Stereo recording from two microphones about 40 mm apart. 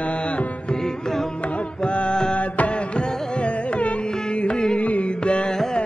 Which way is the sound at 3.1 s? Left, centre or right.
Centre.